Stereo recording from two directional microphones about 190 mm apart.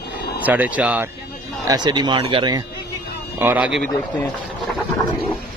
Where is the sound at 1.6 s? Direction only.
20° right (ahead or behind).